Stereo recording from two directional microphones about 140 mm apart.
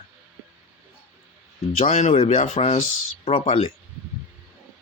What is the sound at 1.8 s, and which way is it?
Speech, 60° left (ahead or behind).